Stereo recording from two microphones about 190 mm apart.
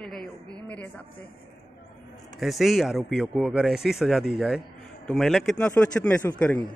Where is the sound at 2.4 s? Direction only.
Centre (ahead or behind).